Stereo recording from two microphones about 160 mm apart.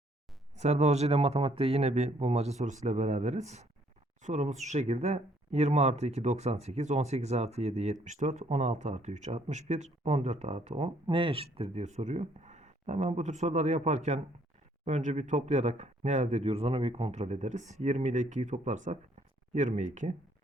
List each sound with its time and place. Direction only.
0.5 s speech: 45° right (ahead or behind)
11.0 s speech: 30° right (ahead or behind); by 20.1 s 50° right (ahead or behind)